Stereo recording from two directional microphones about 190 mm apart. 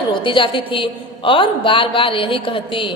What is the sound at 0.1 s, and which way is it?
A woman's voice, 25° left (ahead or behind).